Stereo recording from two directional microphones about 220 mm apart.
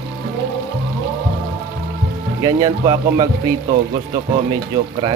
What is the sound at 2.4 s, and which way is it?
Speech, 15° right (ahead or behind).